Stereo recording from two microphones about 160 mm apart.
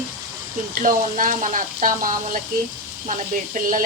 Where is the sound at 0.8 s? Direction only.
55° right (ahead or behind).